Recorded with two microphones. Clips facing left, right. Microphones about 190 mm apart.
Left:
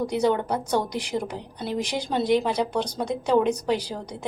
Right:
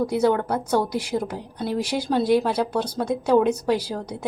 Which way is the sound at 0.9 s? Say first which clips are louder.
Right 3 dB; 10° right (ahead or behind).